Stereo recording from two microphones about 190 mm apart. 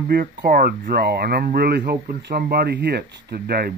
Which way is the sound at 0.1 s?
50° right (ahead or behind).